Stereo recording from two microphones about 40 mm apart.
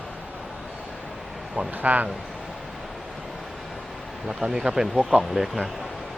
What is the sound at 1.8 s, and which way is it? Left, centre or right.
Speech, right.